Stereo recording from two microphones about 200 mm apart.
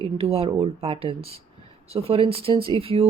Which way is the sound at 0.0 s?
30° right (ahead or behind).